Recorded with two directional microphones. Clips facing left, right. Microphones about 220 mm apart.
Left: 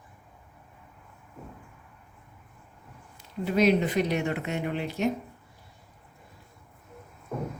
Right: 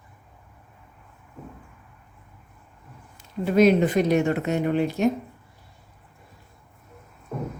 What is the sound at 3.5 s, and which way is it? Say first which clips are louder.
A woman's voice: right 5 dB; 50° right (ahead or behind).